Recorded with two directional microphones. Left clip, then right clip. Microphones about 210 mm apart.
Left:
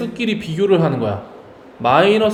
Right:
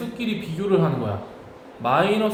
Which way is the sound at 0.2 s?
40° left (ahead or behind).